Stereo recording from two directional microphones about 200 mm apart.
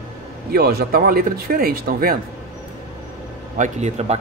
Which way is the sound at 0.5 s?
50° right (ahead or behind).